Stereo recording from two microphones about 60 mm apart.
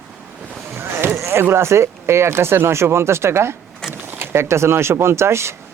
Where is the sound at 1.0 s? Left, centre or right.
Right.